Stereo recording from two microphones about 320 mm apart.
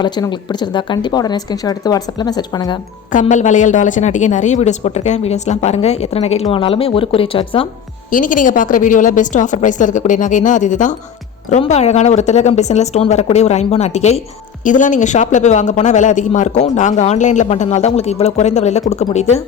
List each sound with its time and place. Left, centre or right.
0.0 s speech: centre
3.1 s a man's voice: left